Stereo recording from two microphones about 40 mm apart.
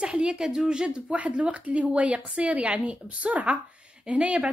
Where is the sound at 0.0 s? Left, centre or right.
Right.